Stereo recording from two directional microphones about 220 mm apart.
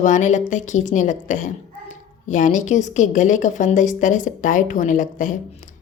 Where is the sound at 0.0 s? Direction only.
35° left (ahead or behind).